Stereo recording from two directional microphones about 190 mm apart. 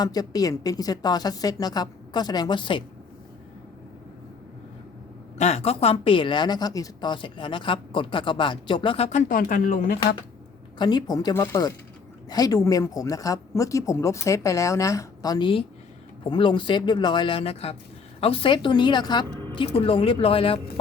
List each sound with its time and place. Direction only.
0.0 s speech: 20° left (ahead or behind)
5.4 s speech: 35° left (ahead or behind)
10.8 s speech: 20° left (ahead or behind)